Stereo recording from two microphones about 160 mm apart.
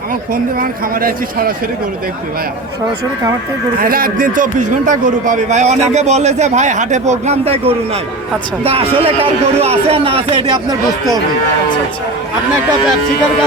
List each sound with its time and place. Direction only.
0.6 s speech: 65° right (ahead or behind)
3.8 s a man's voice: 65° right (ahead or behind); by 10.8 s 30° right (ahead or behind)